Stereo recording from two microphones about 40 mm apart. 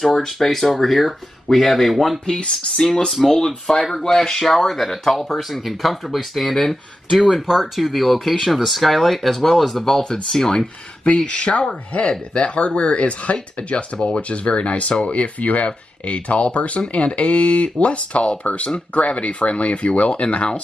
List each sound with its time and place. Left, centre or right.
0.0 s speech: centre
6.6 s speech: centre
7.4 s speech: centre
11.2 s speech: left